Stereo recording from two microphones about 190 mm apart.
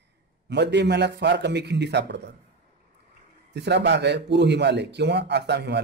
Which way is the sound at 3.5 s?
65° right (ahead or behind).